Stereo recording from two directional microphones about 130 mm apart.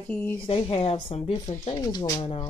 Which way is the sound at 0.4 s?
45° left (ahead or behind).